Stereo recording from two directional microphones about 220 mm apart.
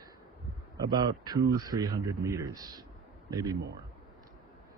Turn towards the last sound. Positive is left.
turn(degrees=-15)  # may be behind; listen again after turning